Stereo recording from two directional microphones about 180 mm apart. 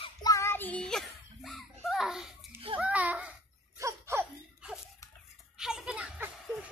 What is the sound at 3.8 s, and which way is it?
Laughter, 10° right (ahead or behind).